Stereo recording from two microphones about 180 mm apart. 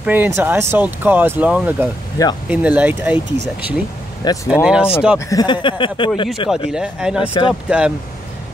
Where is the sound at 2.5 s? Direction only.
10° right (ahead or behind).